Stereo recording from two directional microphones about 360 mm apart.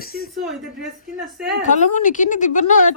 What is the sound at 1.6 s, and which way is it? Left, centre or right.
A man's voice, left.